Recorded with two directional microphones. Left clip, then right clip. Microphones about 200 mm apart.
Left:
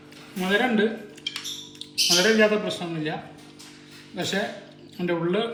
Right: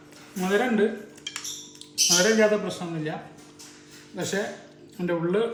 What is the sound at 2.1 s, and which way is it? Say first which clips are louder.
Speech: left 1 dB; centre (ahead or behind).